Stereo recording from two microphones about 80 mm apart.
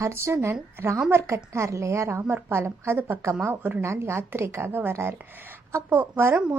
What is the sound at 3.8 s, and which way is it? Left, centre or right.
A woman's voice, right.